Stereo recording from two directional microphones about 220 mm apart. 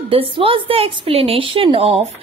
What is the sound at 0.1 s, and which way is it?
A woman's voice, 25° right (ahead or behind).